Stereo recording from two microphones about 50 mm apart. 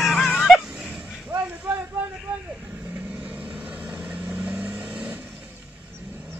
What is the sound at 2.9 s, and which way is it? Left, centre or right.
Vehicle, right.